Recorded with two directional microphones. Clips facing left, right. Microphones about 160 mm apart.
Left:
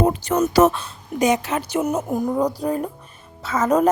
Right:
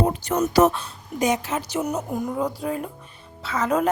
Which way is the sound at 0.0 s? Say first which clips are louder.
Left 3 dB; 90° left.